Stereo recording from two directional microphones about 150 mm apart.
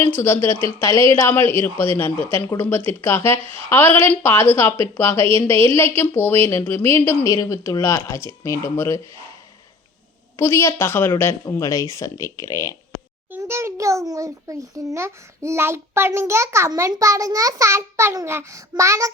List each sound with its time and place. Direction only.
0.2 s speech: 15° left (ahead or behind)
10.3 s speech: 20° left (ahead or behind)
13.3 s a sound: 15° right (ahead or behind)
14.1 s a child's voice: 20° right (ahead or behind)